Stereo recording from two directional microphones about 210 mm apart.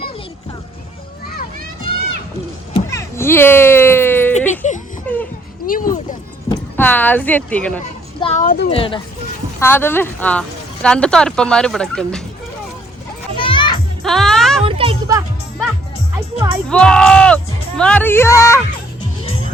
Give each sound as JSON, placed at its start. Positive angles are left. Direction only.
{"t": 2.7, "sound": "a sound", "side_deg": 15}
{"t": 4.6, "sound": "a sound", "side_deg": 35}
{"t": 5.0, "sound": "a sound", "side_deg": 5}
{"t": 5.6, "sound": "a sound", "side_deg": 40}
{"t": 6.5, "sound": "speech", "side_deg": 10}
{"t": 8.2, "sound": "speech", "side_deg": 35}
{"t": 8.7, "sound": "speech", "side_deg": 25}
{"t": 9.6, "sound": "speech", "side_deg": 10}
{"t": 13.4, "sound": "children playing", "side_deg": 25}
{"t": 14.0, "sound": "music", "side_deg": 0}
{"t": 14.6, "sound": "music", "side_deg": -25}
{"t": 16.6, "sound": "speech", "side_deg": 5}